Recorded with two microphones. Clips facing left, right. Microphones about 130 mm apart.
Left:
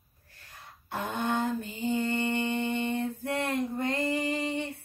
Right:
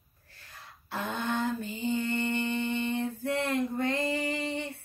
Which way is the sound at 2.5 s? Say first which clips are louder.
Left 1 dB; 50° left (ahead or behind).